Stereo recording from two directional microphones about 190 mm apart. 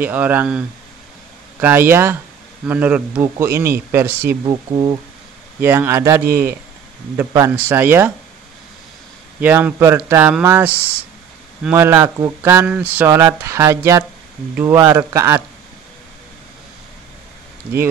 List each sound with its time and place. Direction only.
0.0 s a man's voice: 10° right (ahead or behind)
9.4 s a man's voice: 10° right (ahead or behind)